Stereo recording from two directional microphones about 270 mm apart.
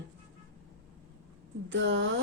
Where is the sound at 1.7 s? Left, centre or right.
Right.